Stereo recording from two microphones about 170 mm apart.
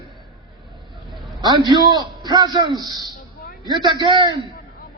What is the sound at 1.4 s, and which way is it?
A man's voice, 25° right (ahead or behind).